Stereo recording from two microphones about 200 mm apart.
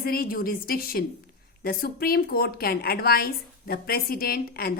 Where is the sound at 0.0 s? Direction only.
50° left (ahead or behind).